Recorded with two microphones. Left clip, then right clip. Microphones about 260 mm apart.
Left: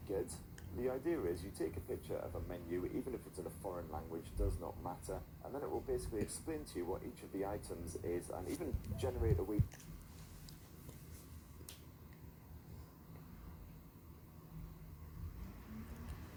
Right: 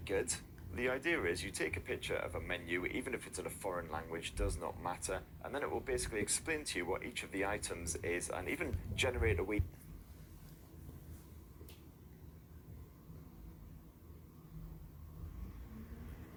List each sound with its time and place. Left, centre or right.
0.1 s speech: right